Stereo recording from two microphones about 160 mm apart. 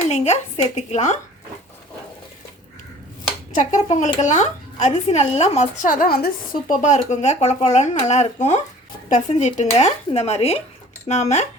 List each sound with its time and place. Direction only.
0.1 s a woman's voice: 45° left (ahead or behind)
3.5 s a woman's voice: 50° left (ahead or behind)